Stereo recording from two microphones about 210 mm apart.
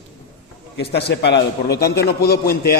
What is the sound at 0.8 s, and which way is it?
A man's voice, 50° left (ahead or behind).